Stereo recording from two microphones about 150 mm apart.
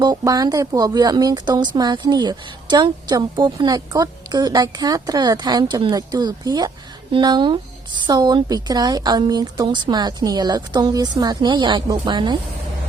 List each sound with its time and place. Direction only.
0.0 s speech: 25° right (ahead or behind)